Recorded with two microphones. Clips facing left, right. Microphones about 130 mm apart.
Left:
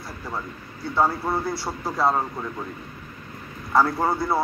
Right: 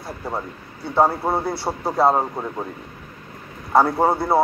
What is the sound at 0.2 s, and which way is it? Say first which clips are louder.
A man's voice: right 4 dB; 25° right (ahead or behind).